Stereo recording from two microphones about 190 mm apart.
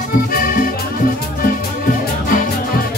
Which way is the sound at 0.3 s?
50° left (ahead or behind).